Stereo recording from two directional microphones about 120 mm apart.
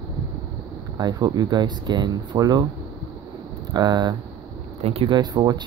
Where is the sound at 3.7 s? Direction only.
35° right (ahead or behind).